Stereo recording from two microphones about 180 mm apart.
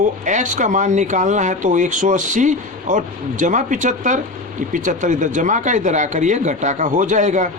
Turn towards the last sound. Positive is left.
turn(degrees=-40)  # may be behind; listen again after turning